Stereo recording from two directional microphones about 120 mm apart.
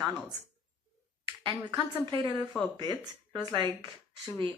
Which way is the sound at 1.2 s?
40° right (ahead or behind).